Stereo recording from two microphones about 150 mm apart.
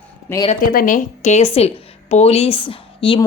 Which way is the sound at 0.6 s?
70° left (ahead or behind).